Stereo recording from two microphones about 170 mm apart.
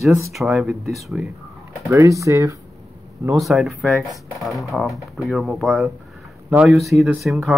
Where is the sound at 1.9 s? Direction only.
20° right (ahead or behind).